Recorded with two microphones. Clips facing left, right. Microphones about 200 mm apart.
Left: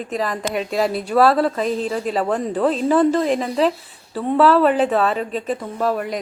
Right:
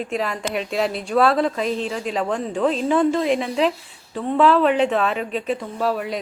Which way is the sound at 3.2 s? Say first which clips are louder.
Left 1 dB; 40° left (ahead or behind).